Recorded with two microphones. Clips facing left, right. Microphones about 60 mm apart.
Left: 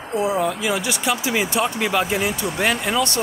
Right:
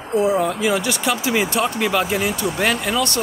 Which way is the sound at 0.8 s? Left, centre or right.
Centre.